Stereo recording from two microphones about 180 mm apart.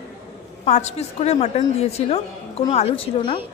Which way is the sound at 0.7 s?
40° left (ahead or behind).